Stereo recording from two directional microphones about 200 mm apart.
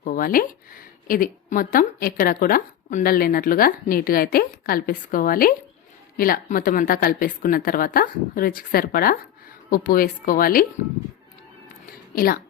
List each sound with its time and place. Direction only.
0.0 s speech: 45° left (ahead or behind)
12.1 s a woman's voice: 45° left (ahead or behind)